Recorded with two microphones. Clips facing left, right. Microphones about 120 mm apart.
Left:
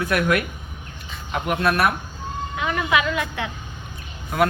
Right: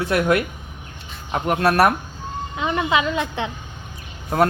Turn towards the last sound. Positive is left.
turn(degrees=-35)  # may be behind; listen again after turning